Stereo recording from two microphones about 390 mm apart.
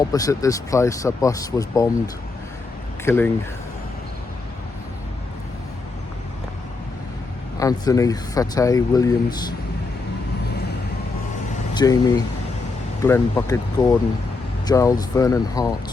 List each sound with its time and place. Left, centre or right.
0.0 s speech: centre
3.0 s speech: centre
7.6 s speech: centre
11.7 s speech: centre